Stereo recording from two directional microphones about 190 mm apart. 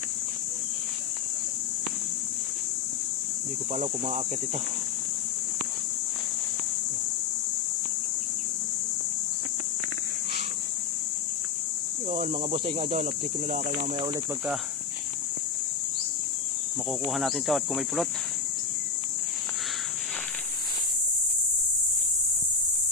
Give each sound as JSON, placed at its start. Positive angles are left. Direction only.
{"t": 3.7, "sound": "speech", "side_deg": -35}
{"t": 12.1, "sound": "speech", "side_deg": -40}
{"t": 17.0, "sound": "speech", "side_deg": 0}